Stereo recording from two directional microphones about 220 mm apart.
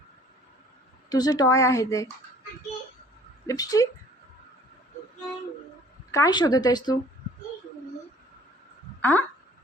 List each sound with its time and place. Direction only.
1.1 s speech: 15° left (ahead or behind)
3.4 s speech: 15° left (ahead or behind)
6.1 s speech: 15° left (ahead or behind)
9.0 s a sound: 10° left (ahead or behind)